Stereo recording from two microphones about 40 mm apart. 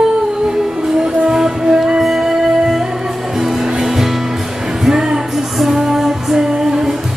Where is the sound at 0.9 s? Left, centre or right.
Centre.